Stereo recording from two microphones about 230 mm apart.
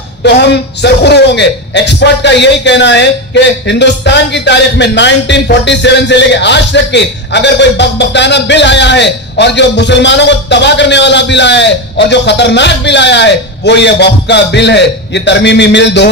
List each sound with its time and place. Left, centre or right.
0.2 s a man's voice: left